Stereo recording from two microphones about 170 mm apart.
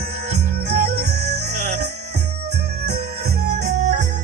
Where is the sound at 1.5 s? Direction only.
45° right (ahead or behind).